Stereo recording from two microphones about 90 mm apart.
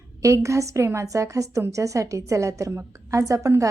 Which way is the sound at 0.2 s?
35° right (ahead or behind).